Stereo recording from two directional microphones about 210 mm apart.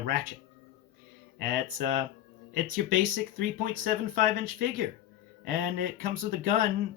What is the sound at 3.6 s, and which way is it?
Speech, 40° right (ahead or behind).